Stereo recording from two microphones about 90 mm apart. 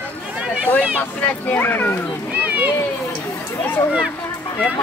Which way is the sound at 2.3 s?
15° right (ahead or behind).